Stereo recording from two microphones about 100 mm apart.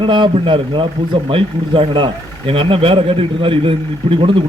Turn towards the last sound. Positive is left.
turn(degrees=-60)  # may be behind; listen again after turning